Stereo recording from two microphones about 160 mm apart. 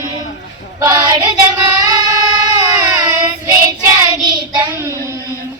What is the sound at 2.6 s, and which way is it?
Child singing, 15° right (ahead or behind).